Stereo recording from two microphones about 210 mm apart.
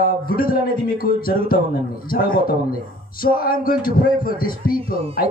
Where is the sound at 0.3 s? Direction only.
45° left (ahead or behind).